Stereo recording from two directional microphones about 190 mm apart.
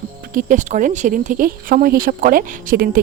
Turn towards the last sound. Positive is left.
turn(degrees=-50)  # may be behind; listen again after turning